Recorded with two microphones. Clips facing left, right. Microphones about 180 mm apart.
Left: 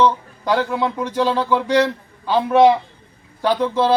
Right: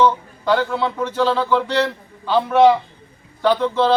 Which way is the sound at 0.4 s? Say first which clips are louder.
Even; 10° left (ahead or behind).